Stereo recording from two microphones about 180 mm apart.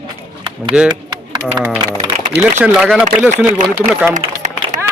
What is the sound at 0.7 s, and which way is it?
Speech, 40° right (ahead or behind).